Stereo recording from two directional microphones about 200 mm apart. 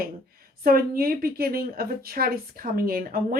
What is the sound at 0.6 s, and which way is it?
A woman's voice, 50° right (ahead or behind).